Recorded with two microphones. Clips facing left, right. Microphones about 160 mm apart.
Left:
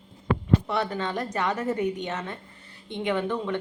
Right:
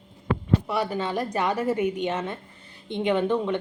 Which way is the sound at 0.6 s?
10° right (ahead or behind).